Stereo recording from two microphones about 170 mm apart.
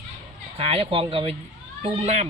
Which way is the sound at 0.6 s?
35° right (ahead or behind).